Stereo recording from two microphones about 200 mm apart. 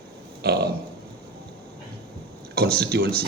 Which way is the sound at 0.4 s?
55° right (ahead or behind).